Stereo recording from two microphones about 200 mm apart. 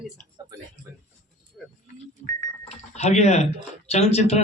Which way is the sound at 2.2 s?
35° left (ahead or behind).